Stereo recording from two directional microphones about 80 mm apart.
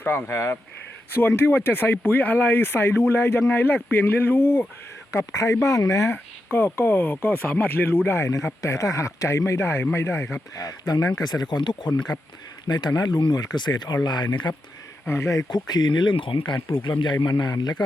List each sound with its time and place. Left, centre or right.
0.0 s speech: left
5.1 s speech: left
6.5 s speech: left
10.5 s speech: left
15.0 s speech: left
15.4 s a man's voice: left
17.4 s speech: left